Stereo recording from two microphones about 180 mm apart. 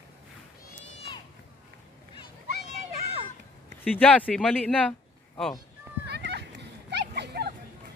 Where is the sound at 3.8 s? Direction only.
10° left (ahead or behind).